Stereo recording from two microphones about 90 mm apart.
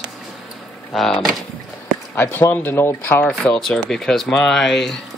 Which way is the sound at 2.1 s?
25° left (ahead or behind).